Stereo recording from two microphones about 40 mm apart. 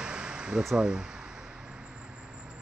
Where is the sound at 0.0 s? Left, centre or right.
Right.